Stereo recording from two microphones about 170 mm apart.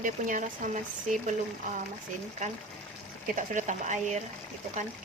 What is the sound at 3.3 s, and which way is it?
Speech, 50° right (ahead or behind).